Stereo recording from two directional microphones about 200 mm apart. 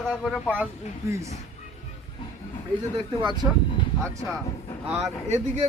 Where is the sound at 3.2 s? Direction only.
20° right (ahead or behind).